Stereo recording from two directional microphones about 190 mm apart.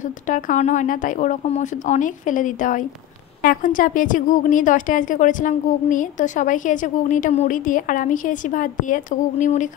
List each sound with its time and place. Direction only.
0.0 s a woman's voice: 45° left (ahead or behind)